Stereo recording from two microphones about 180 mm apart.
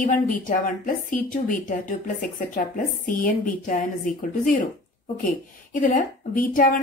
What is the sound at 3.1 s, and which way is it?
A woman's voice, 50° left (ahead or behind).